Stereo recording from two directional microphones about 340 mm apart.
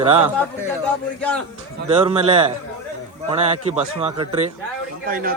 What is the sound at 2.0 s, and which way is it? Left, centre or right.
A man's voice, centre.